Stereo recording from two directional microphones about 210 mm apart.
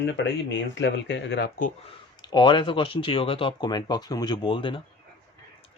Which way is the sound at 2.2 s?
20° left (ahead or behind).